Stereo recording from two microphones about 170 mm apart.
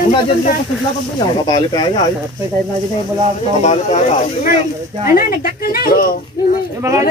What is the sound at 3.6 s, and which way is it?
Speech, 40° left (ahead or behind).